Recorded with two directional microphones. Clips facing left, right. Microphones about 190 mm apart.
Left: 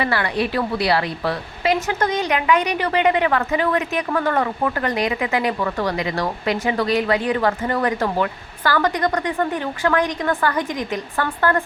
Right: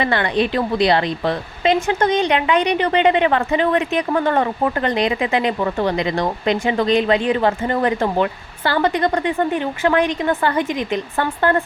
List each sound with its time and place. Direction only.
0.0 s a woman's voice: 25° right (ahead or behind)